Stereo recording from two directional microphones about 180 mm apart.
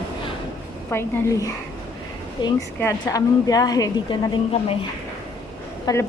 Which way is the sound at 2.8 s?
15° left (ahead or behind).